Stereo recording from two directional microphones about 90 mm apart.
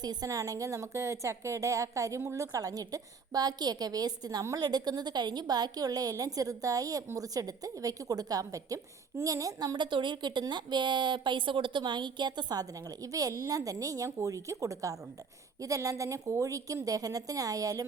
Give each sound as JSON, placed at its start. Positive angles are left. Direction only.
{"t": 0.0, "sound": "a woman's voice", "side_deg": -45}